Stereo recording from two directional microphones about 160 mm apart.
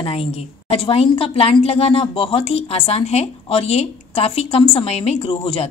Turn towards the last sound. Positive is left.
turn(degrees=40)  # may be behind; listen again after turning